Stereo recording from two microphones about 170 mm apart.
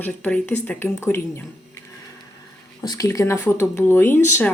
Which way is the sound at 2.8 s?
20° left (ahead or behind).